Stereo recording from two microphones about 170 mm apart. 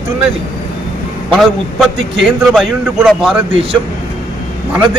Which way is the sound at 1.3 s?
Centre (ahead or behind).